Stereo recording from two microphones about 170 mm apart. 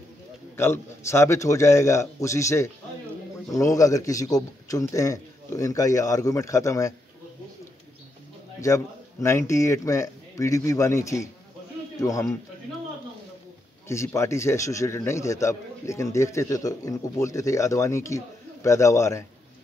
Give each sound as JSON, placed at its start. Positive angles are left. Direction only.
{"t": 0.6, "sound": "a man's voice", "side_deg": 15}
{"t": 8.5, "sound": "a man's voice", "side_deg": 20}
{"t": 13.8, "sound": "a man's voice", "side_deg": 15}